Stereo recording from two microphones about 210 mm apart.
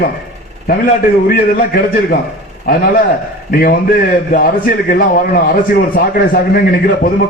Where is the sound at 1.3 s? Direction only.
45° left (ahead or behind).